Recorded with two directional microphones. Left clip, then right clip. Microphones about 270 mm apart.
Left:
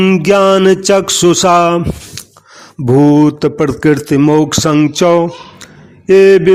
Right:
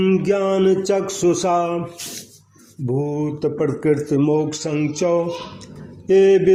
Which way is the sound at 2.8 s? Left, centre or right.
Left.